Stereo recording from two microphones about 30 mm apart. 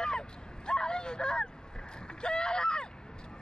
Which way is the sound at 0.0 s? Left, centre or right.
Left.